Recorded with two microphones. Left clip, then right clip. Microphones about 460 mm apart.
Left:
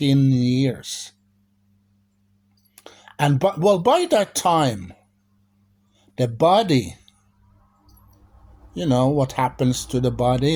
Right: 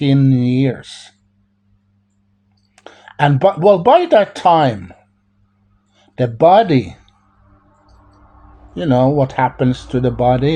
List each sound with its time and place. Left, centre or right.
0.0 s speech: left
2.7 s speech: left
6.0 s speech: left
8.7 s speech: left